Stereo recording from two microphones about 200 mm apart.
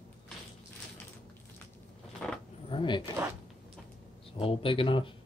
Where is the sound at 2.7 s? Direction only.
25° left (ahead or behind).